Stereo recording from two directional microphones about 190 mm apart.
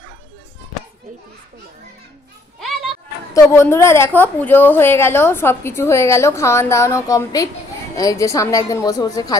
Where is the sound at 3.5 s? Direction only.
15° left (ahead or behind).